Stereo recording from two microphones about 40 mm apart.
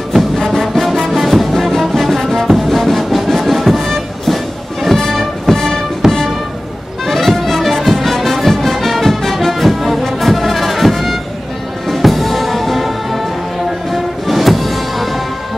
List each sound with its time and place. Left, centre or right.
0.1 s music: centre
6.0 s music: centre
7.1 s music: centre